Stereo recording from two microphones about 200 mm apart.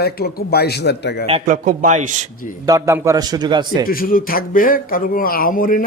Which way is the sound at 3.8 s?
45° left (ahead or behind).